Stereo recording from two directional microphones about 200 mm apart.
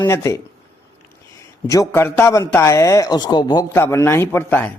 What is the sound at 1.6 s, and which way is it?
A man's voice, 15° left (ahead or behind).